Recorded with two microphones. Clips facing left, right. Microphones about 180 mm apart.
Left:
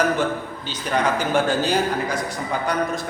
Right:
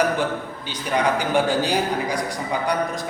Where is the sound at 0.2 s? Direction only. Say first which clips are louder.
Left 1 dB; 15° right (ahead or behind).